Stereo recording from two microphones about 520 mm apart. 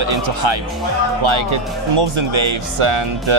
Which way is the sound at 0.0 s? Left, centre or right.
Right.